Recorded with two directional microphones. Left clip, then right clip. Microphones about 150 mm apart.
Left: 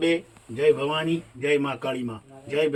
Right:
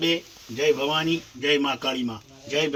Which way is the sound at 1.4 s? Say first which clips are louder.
Right 1 dB; 65° right (ahead or behind).